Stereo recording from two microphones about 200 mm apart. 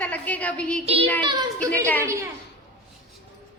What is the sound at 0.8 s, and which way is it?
Child singing, 30° right (ahead or behind).